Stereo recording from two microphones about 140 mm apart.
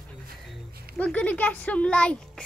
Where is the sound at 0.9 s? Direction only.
10° left (ahead or behind).